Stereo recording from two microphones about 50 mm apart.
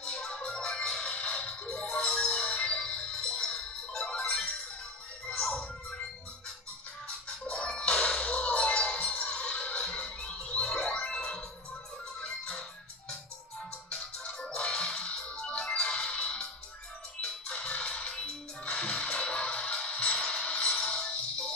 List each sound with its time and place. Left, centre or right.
0.0 s music: centre
7.1 s music: left
13.9 s music: centre
17.5 s music: centre